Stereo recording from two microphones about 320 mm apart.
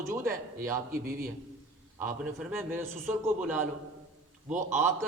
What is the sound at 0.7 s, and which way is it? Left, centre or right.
Speech, right.